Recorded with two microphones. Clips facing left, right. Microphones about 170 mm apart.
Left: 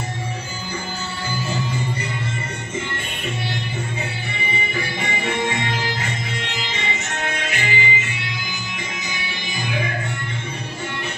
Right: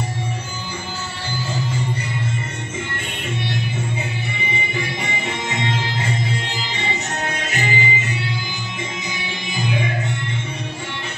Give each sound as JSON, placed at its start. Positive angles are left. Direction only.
{"t": 4.7, "sound": "music", "side_deg": -25}